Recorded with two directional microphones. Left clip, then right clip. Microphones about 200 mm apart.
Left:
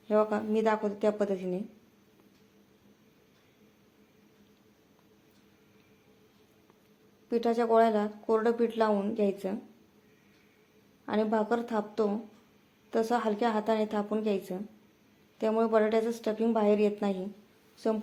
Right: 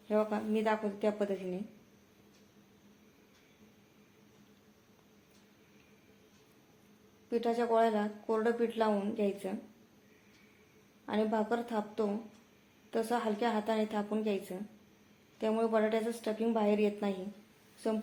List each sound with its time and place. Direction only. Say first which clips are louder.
0.1 s speech: left 5 dB; 35° left (ahead or behind)
7.3 s speech: left 4 dB; 35° left (ahead or behind)
11.0 s speech: left 4 dB; 35° left (ahead or behind)